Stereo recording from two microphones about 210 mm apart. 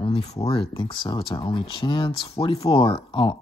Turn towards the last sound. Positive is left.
turn(degrees=25)  # may be behind; listen again after turning